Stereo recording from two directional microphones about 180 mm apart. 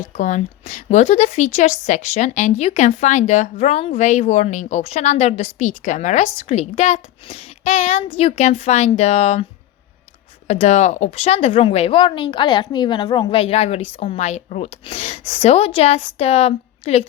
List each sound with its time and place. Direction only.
0.0 s a woman's voice: 40° left (ahead or behind)